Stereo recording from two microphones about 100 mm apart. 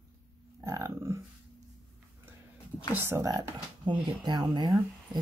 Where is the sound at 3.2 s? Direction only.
35° right (ahead or behind).